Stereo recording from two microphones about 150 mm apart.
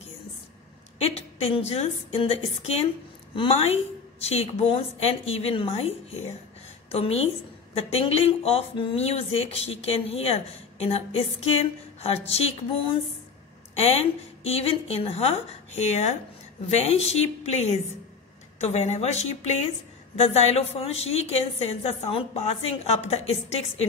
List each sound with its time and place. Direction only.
0.9 s speech: 40° left (ahead or behind)